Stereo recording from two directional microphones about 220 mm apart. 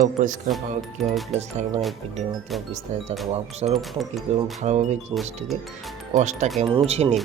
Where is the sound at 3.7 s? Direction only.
Centre (ahead or behind).